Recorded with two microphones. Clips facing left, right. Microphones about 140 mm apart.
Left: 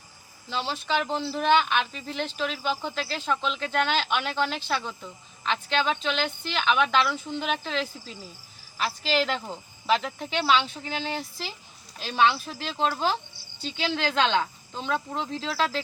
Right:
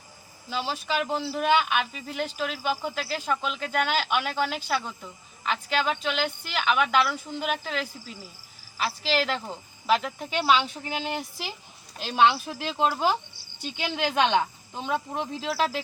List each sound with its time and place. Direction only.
0.5 s a woman's voice: 10° right (ahead or behind)